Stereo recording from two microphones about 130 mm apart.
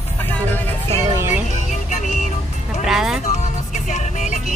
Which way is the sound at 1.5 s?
70° left (ahead or behind).